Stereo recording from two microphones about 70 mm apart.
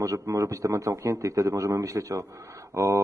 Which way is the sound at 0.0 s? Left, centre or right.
Right.